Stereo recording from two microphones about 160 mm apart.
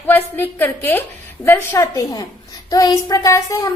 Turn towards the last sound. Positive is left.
turn(degrees=20)  # may be behind; listen again after turning